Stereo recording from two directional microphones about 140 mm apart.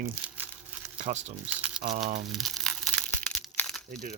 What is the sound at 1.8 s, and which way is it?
Speech, 65° right (ahead or behind).